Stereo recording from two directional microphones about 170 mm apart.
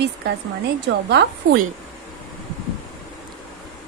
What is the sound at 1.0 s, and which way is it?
Speech, 75° right (ahead or behind).